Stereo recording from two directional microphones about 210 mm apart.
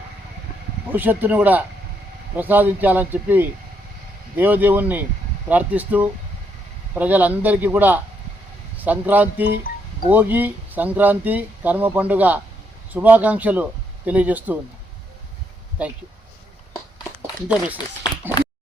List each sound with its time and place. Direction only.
0.9 s speech: 10° right (ahead or behind)
15.8 s speech: 5° right (ahead or behind)
18.0 s a sound: 20° left (ahead or behind)